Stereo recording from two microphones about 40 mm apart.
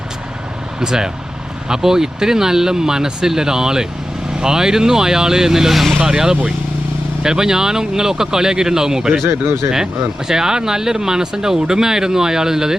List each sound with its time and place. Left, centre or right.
0.8 s speech: centre
6.0 s speech: centre
9.2 s speech: right
9.7 s speech: centre